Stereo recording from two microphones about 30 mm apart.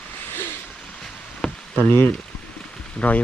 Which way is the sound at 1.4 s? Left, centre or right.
Left.